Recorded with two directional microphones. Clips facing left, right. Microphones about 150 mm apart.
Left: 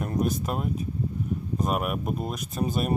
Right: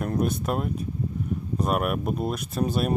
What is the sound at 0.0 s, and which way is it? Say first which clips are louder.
Speech: right 1 dB; centre (ahead or behind).